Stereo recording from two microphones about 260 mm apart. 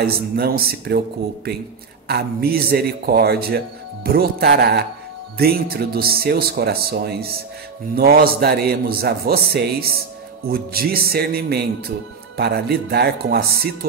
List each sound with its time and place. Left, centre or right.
0.0 s a man's voice: right